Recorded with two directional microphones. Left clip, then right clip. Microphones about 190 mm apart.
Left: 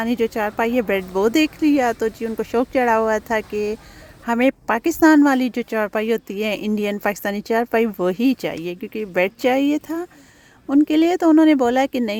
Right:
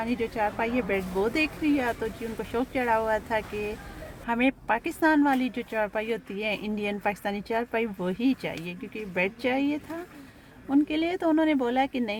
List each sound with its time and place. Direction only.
0.0 s speech: 50° left (ahead or behind)